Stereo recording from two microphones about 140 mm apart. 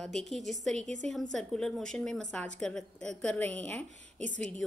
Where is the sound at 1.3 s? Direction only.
5° left (ahead or behind).